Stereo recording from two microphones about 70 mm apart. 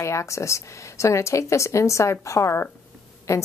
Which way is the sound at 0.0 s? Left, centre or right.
Left.